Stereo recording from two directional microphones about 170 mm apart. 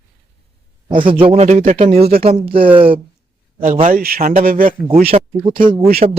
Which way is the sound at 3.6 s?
50° right (ahead or behind).